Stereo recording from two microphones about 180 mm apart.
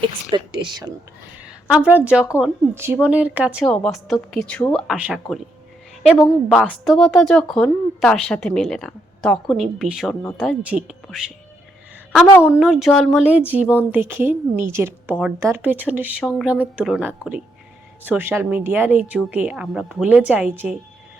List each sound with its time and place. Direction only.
0.3 s speech: 25° right (ahead or behind)
1.6 s speech: 5° right (ahead or behind)
6.5 s speech: centre (ahead or behind)
12.4 s speech: 5° right (ahead or behind)